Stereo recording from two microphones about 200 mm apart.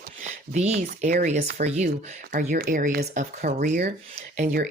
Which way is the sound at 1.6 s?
35° right (ahead or behind).